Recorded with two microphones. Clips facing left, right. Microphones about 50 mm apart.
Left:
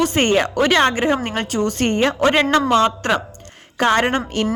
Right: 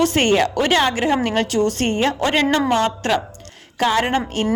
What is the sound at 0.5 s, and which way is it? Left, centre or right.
A woman's voice, left.